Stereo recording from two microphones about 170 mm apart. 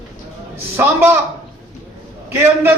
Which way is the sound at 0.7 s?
15° right (ahead or behind).